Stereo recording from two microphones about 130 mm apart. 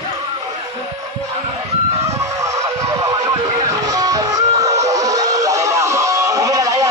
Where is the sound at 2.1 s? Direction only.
25° right (ahead or behind).